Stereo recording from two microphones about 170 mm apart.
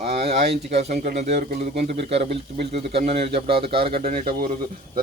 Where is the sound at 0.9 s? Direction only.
55° right (ahead or behind); by 2.0 s 75° right (ahead or behind).